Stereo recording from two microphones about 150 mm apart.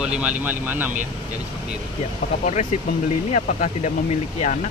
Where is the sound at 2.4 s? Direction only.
50° left (ahead or behind).